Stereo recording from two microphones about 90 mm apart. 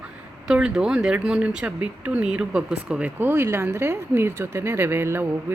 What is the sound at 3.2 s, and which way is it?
A woman's voice, 25° right (ahead or behind).